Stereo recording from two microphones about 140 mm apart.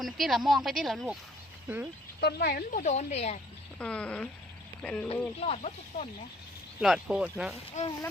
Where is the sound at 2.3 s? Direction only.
90° left; by 3.4 s 50° left (ahead or behind).